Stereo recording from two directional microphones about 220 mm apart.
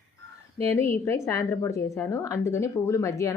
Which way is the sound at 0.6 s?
10° left (ahead or behind).